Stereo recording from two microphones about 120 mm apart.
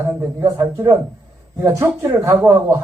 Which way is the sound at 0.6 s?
20° right (ahead or behind).